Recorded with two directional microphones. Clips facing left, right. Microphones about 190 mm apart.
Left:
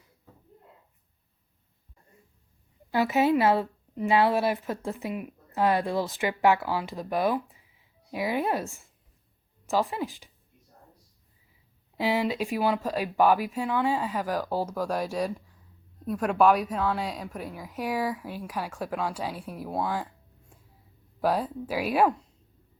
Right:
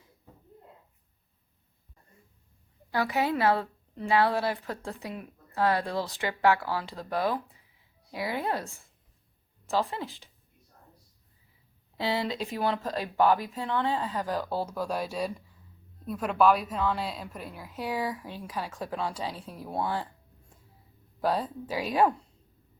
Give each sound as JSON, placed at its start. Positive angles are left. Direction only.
{"t": 2.9, "sound": "a woman's voice", "side_deg": 15}
{"t": 11.9, "sound": "a woman's voice", "side_deg": 15}
{"t": 19.7, "sound": "speech", "side_deg": 0}
{"t": 21.2, "sound": "a woman's voice", "side_deg": 10}